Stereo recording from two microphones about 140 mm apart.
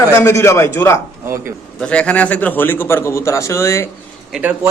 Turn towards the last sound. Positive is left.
turn(degrees=-10)  # may be behind; listen again after turning